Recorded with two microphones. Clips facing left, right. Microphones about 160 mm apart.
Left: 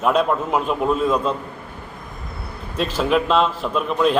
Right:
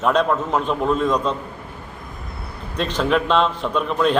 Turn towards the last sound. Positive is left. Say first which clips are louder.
# even
turn(degrees=5)  # may be behind; listen again after turning